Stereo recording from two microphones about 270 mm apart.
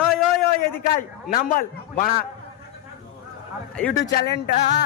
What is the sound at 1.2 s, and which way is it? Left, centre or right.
A man's voice, left.